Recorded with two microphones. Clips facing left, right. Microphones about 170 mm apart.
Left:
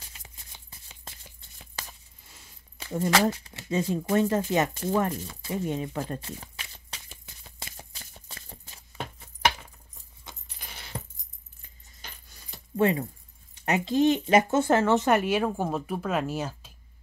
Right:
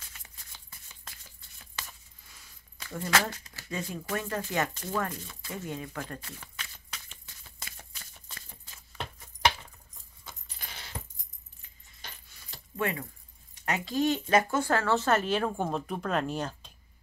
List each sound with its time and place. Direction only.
0.0 s a sound: 20° left (ahead or behind)
1.8 s speech: 25° left (ahead or behind)
5.9 s shuffling cards: 25° left (ahead or behind)
12.7 s speech: 25° left (ahead or behind); by 16.7 s 5° left (ahead or behind)